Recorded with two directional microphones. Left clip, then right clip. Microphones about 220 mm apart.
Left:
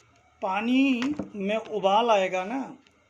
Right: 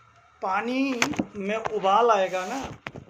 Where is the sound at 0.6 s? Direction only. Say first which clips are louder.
Left 3 dB; 70° left (ahead or behind).